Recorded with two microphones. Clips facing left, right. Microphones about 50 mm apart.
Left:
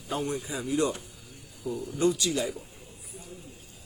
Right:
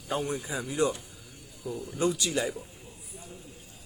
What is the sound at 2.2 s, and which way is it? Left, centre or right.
Speech, right.